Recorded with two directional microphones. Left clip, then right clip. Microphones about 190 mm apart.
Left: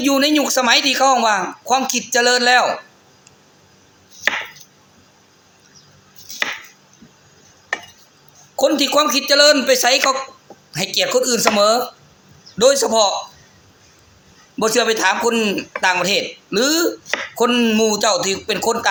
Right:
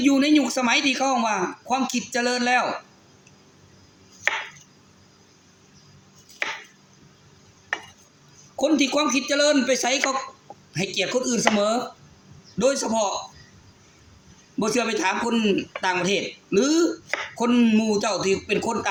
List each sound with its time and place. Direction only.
0.0 s speech: 15° right (ahead or behind)
8.5 s a man's voice: 10° right (ahead or behind)
14.6 s speech: 15° right (ahead or behind)